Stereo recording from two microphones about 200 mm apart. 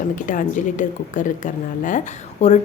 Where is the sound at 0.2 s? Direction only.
40° left (ahead or behind).